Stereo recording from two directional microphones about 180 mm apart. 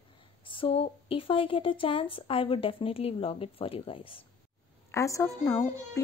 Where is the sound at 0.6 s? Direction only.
30° left (ahead or behind).